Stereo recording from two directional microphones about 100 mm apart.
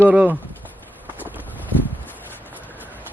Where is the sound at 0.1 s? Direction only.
10° right (ahead or behind).